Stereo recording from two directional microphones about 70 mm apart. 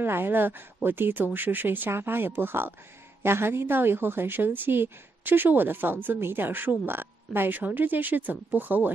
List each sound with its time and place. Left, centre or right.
0.0 s a woman's voice: right